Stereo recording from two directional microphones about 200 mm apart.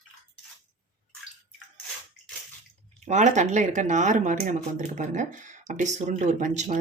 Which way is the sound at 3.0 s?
35° right (ahead or behind).